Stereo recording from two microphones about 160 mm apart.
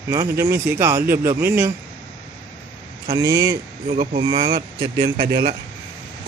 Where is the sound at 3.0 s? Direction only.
25° right (ahead or behind).